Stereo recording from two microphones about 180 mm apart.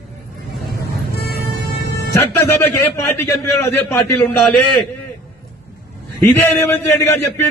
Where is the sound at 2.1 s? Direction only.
15° left (ahead or behind).